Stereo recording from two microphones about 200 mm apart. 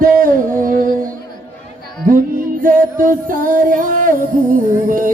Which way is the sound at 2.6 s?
40° right (ahead or behind).